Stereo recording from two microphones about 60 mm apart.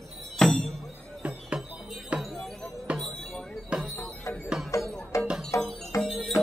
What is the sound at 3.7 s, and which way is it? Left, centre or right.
Music, centre.